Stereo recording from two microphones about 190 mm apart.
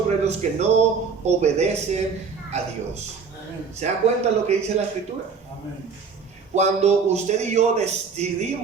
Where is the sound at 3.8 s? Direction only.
35° right (ahead or behind).